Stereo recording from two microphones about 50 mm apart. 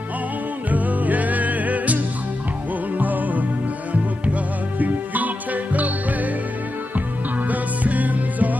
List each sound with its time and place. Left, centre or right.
0.7 s music: right
3.0 s music: right
7.4 s music: right